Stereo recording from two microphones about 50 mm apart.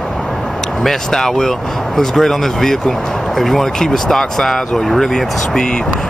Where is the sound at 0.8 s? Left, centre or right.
Centre.